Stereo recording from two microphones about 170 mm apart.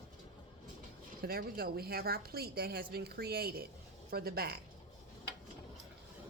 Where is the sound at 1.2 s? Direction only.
60° right (ahead or behind).